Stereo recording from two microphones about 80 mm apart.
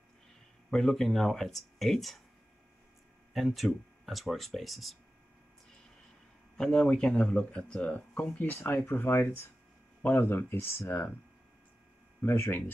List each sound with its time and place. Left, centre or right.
0.7 s speech: centre
3.3 s speech: centre
6.5 s speech: centre; by 10.7 s left
12.2 s speech: left